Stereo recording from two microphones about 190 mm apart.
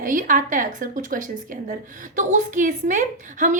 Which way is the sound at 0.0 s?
45° right (ahead or behind).